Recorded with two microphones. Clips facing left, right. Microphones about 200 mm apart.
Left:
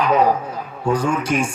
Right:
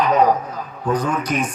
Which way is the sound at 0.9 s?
30° left (ahead or behind).